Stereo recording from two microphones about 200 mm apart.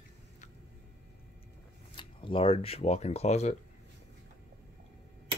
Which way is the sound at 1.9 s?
25° left (ahead or behind).